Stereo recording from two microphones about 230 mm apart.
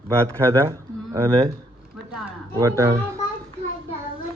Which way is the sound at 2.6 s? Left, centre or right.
Centre.